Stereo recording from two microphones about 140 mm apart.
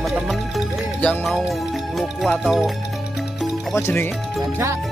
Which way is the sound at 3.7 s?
15° left (ahead or behind).